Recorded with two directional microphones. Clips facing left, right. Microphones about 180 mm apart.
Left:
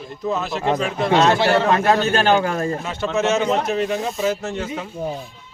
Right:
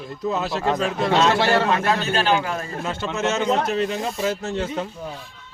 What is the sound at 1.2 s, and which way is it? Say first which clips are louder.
A man's voice: left 2 dB; 45° left (ahead or behind).